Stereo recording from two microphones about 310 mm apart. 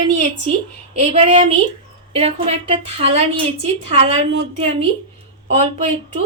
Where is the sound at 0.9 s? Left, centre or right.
Centre.